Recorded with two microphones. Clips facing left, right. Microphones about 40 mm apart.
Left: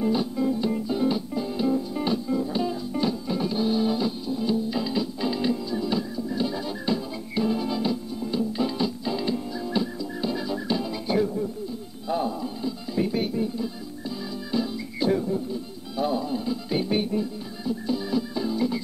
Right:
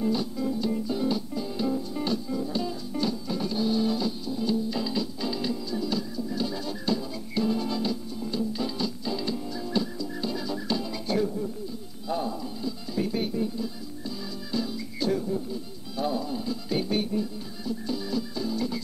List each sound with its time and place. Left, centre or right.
0.0 s music: centre